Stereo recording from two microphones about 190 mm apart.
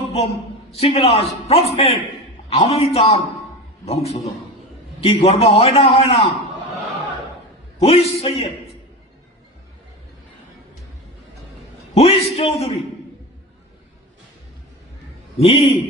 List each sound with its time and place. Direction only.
0.7 s a man's voice: 30° left (ahead or behind)
7.8 s a man's voice: 30° left (ahead or behind)
11.9 s a man's voice: 30° left (ahead or behind)
15.4 s a man's voice: 30° left (ahead or behind)